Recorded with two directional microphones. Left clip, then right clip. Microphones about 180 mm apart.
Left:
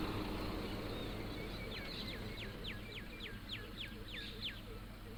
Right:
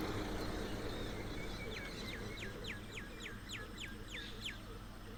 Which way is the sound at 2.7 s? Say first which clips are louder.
Right 1 dB; 65° right (ahead or behind).